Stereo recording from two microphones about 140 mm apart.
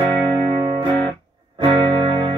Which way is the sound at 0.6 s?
35° right (ahead or behind).